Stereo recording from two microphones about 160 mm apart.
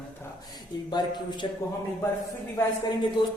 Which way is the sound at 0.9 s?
25° left (ahead or behind).